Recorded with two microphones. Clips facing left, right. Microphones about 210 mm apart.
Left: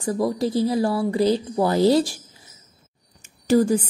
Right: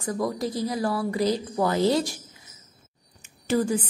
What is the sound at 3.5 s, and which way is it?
Speech, 40° left (ahead or behind).